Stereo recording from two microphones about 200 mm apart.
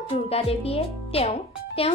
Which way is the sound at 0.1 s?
30° left (ahead or behind).